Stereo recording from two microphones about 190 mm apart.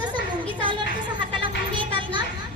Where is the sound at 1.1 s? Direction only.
25° right (ahead or behind).